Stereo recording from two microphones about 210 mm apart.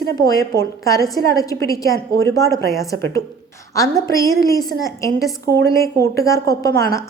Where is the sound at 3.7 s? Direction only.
15° left (ahead or behind).